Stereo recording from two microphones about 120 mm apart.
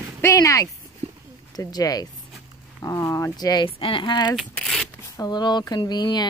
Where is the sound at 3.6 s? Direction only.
45° left (ahead or behind).